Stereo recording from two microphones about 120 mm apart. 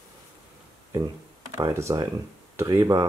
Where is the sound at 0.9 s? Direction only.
25° right (ahead or behind).